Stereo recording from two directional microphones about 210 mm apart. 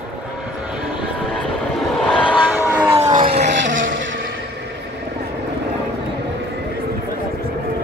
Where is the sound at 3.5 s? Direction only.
60° right (ahead or behind).